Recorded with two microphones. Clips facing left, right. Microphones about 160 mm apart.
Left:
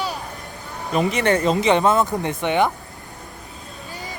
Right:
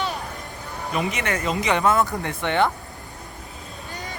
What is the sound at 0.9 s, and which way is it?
Speech, 35° left (ahead or behind).